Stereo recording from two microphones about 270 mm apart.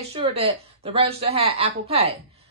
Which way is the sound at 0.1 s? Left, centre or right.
Right.